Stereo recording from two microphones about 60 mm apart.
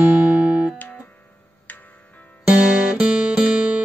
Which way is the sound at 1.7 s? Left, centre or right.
Left.